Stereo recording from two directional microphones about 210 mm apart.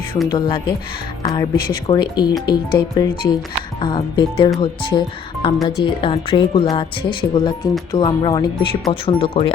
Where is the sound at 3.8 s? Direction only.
20° left (ahead or behind).